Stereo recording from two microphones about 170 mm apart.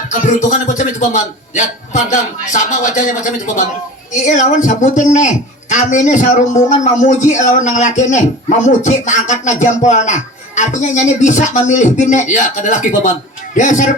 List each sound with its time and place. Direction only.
0.1 s speech: 45° left (ahead or behind)
4.1 s speech: 45° left (ahead or behind)